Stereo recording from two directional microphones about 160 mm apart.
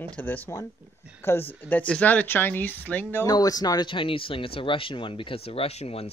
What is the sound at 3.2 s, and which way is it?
Speech, 25° left (ahead or behind).